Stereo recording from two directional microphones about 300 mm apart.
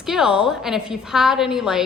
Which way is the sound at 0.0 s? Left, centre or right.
Centre.